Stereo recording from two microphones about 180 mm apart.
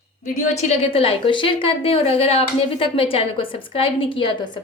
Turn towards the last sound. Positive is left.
turn(degrees=25)  # may be behind; listen again after turning